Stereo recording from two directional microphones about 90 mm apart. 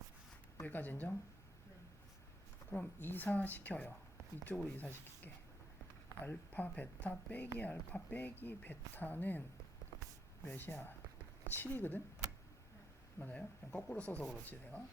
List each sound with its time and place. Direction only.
0.6 s speech: 20° left (ahead or behind)
2.6 s speech: 15° left (ahead or behind)
10.4 s speech: 20° left (ahead or behind)
13.1 s speech: 15° left (ahead or behind)